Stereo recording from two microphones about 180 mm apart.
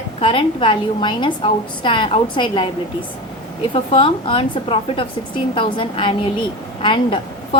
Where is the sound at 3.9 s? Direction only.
30° left (ahead or behind).